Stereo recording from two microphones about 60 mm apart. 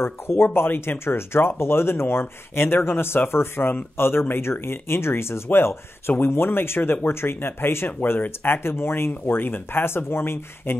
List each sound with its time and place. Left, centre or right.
0.0 s speech: left